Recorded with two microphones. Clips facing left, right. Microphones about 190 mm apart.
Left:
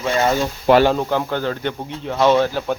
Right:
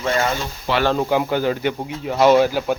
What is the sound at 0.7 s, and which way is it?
Speech, 55° left (ahead or behind).